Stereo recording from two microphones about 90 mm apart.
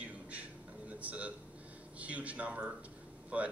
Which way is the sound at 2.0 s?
15° right (ahead or behind).